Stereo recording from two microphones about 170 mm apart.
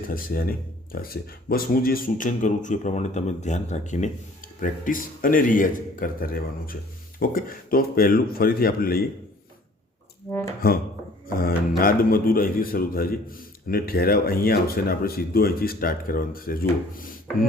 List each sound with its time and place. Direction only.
0.1 s a man's voice: 55° left (ahead or behind)
10.6 s a man's voice: 60° left (ahead or behind)